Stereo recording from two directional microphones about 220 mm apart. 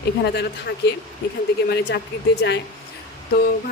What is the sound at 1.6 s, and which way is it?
Speech, 50° left (ahead or behind).